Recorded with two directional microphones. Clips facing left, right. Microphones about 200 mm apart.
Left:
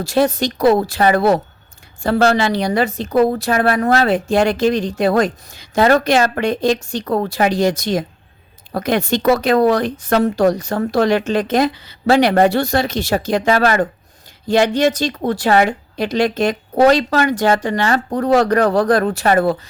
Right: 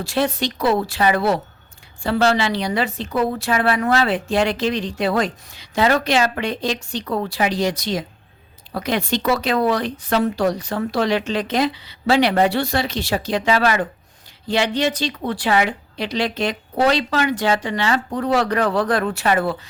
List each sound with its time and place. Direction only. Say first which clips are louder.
0.0 s speech: left 5 dB; 40° left (ahead or behind)